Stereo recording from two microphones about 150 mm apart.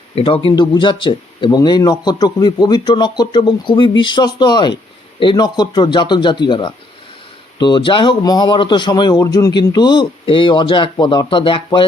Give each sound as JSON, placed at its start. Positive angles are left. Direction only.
{"t": 0.2, "sound": "a man's voice", "side_deg": 35}